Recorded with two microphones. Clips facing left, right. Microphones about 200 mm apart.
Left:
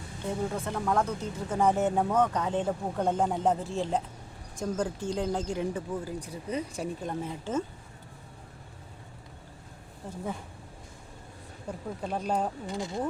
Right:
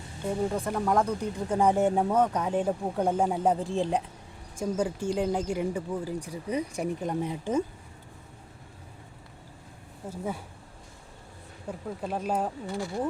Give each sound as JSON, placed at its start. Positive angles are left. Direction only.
{"t": 0.5, "sound": "speech", "side_deg": -10}
{"t": 10.1, "sound": "speech", "side_deg": -10}
{"t": 11.7, "sound": "speech", "side_deg": -5}
{"t": 12.6, "sound": "speech", "side_deg": 20}